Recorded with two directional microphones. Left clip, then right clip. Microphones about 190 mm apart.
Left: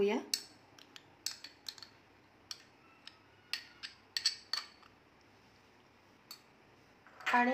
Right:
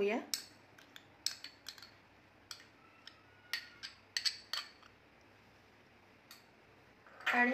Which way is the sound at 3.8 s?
Centre (ahead or behind).